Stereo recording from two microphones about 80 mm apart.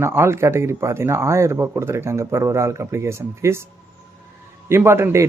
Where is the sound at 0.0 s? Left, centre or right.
Right.